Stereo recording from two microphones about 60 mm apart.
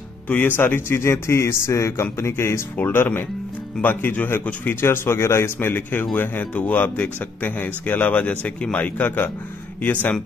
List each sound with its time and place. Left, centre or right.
0.3 s speech: left
4.8 s speech: left